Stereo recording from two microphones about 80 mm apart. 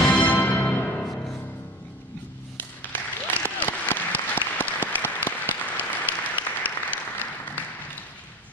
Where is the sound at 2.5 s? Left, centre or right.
Left.